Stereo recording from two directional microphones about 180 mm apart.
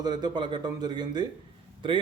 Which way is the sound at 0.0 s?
25° right (ahead or behind).